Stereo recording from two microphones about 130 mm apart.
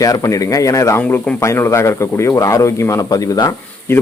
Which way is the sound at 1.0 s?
10° left (ahead or behind).